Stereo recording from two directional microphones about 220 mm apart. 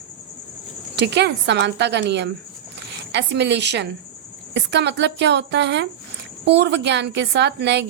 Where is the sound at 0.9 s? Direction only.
50° right (ahead or behind).